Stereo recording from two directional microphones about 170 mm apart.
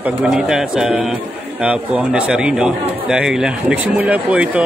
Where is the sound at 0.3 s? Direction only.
5° right (ahead or behind).